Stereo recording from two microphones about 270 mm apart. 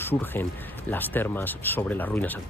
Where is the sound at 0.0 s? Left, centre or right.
Centre.